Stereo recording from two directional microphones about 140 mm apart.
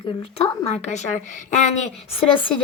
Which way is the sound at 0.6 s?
50° left (ahead or behind).